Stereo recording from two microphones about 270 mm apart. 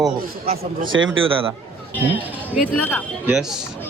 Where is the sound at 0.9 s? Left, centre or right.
Right.